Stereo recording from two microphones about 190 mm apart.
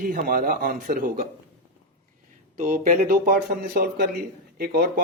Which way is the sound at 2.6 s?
45° right (ahead or behind).